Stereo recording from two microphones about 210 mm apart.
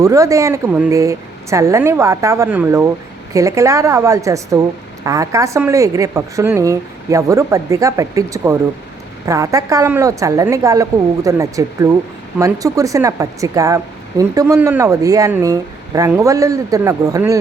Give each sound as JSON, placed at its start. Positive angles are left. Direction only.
{"t": 0.0, "sound": "speech", "side_deg": -15}